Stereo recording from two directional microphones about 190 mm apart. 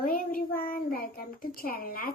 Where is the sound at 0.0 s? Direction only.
50° left (ahead or behind).